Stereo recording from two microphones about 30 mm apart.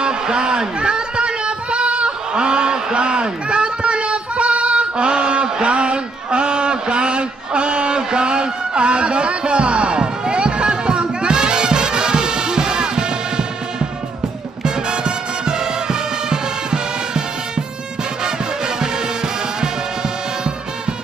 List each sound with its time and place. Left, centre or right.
0.0 s a sound: right
14.6 s music: right
18.8 s music: right